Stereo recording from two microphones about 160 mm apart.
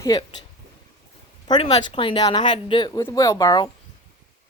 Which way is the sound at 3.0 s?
20° left (ahead or behind).